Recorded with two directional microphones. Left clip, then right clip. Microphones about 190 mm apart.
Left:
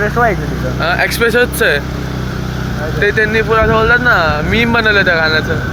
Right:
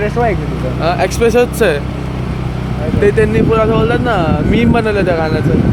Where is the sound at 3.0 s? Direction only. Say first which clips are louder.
Even; 30° right (ahead or behind).